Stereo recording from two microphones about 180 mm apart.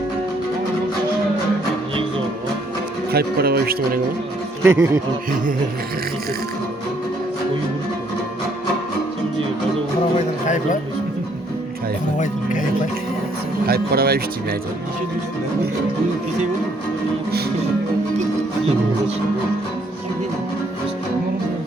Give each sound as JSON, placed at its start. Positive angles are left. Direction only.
{"t": 3.1, "sound": "speech", "side_deg": -60}
{"t": 4.6, "sound": "speech", "side_deg": -15}
{"t": 10.4, "sound": "speech", "side_deg": 45}
{"t": 12.1, "sound": "speech", "side_deg": 45}
{"t": 13.7, "sound": "speech", "side_deg": -55}